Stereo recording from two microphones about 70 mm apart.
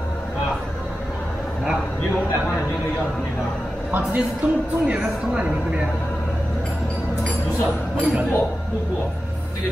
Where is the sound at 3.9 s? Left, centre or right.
Right.